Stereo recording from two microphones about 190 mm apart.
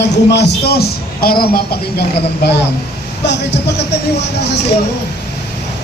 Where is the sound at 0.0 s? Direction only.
60° left (ahead or behind).